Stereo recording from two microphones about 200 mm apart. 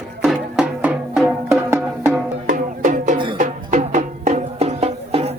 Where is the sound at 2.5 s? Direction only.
40° right (ahead or behind).